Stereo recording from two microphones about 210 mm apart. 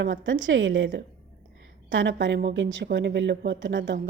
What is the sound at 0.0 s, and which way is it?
Speech, 60° right (ahead or behind).